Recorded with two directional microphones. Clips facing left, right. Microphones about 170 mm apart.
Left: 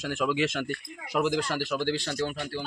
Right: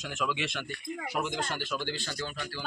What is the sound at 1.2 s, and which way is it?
Speech, 85° left.